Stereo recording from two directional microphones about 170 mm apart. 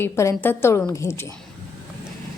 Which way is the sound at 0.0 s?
15° left (ahead or behind).